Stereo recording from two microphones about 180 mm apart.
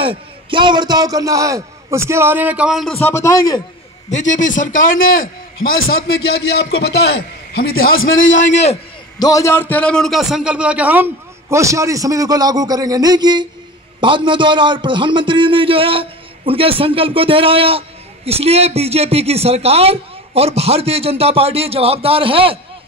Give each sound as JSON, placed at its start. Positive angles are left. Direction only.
{"t": 0.0, "sound": "a man's voice", "side_deg": -30}
{"t": 3.0, "sound": "speech", "side_deg": 15}
{"t": 4.1, "sound": "a man's voice", "side_deg": 45}
{"t": 4.7, "sound": "a man's voice", "side_deg": 90}
{"t": 5.9, "sound": "a man's voice", "side_deg": 60}
{"t": 9.2, "sound": "a man's voice", "side_deg": 15}